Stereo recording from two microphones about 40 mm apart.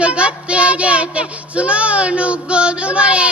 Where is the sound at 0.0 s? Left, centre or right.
Right.